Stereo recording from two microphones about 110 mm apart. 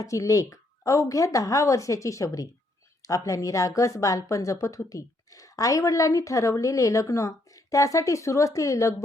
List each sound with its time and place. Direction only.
0.0 s speech: 30° left (ahead or behind)